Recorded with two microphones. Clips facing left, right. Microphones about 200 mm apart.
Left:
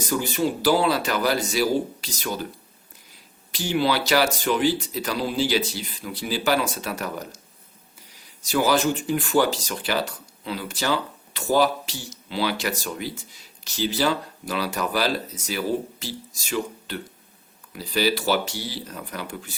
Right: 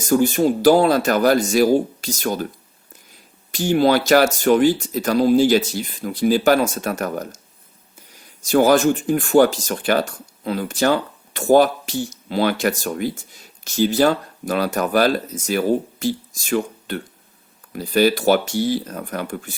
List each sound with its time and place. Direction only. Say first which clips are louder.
0.0 s speech: right 8 dB; 45° right (ahead or behind)
3.5 s speech: right 7 dB; 50° right (ahead or behind)